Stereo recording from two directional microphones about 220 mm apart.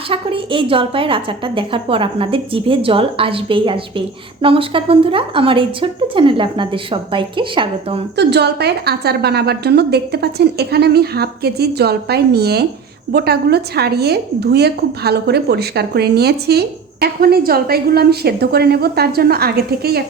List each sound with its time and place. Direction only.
0.1 s a woman's voice: 25° right (ahead or behind)
8.1 s a woman's voice: 50° right (ahead or behind)